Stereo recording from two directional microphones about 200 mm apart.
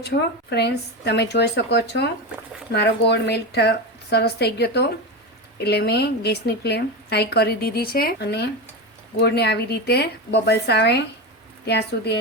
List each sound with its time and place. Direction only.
0.0 s speech: 55° left (ahead or behind)